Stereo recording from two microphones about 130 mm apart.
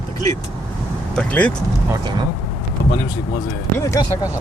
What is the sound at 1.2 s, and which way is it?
Speech, 10° left (ahead or behind).